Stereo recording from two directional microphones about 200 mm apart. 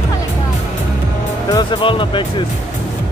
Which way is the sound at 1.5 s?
20° left (ahead or behind).